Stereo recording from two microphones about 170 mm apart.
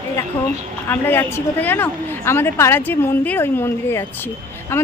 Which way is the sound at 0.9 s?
10° left (ahead or behind).